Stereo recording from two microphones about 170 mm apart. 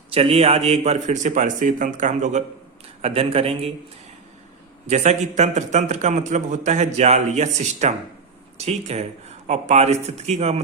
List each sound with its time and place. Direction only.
0.1 s a man's voice: 35° right (ahead or behind)
3.0 s speech: 35° right (ahead or behind)
4.9 s a man's voice: 40° right (ahead or behind)